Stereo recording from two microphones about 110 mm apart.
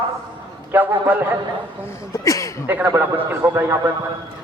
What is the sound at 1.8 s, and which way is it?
Speech, 25° left (ahead or behind).